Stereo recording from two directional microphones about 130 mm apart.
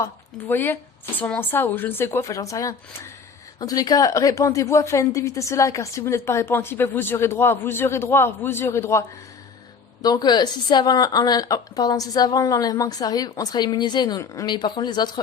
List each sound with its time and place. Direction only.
0.0 s a woman's voice: 15° left (ahead or behind); by 15.2 s 35° left (ahead or behind)